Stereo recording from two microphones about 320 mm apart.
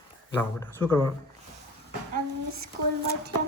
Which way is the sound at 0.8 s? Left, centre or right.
Centre.